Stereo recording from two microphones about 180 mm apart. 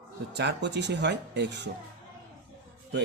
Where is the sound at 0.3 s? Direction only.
70° right (ahead or behind).